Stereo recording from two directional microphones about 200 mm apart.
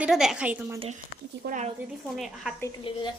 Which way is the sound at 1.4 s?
40° right (ahead or behind).